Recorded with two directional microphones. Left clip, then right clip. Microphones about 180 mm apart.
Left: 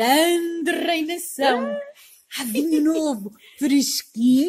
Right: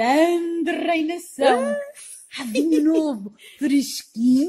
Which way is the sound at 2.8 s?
35° left (ahead or behind).